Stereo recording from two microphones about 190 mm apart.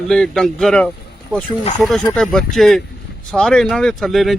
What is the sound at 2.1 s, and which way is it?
Speech, centre (ahead or behind).